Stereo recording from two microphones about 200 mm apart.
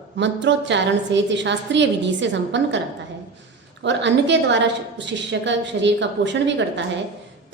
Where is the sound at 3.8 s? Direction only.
60° right (ahead or behind).